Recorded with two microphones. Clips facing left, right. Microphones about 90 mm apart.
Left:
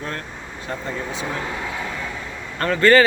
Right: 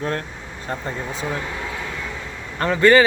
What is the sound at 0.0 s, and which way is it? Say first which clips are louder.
Speech: right 4 dB; 35° right (ahead or behind).